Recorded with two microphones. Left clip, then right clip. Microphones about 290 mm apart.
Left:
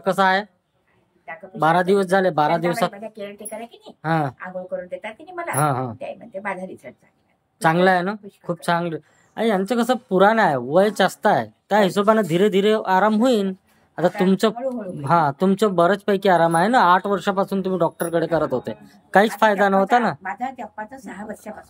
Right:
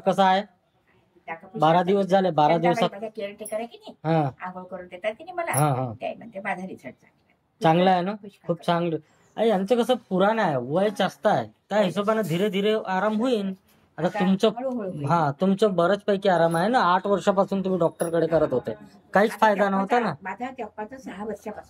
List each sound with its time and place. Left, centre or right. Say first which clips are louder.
0.0 s speech: left 2 dB; centre